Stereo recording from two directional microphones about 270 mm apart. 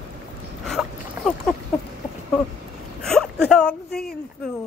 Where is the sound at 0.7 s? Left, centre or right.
Centre.